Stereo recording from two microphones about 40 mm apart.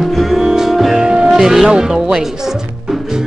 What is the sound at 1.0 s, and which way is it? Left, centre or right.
Music, centre.